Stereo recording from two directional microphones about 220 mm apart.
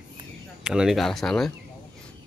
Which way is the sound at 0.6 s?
Centre (ahead or behind).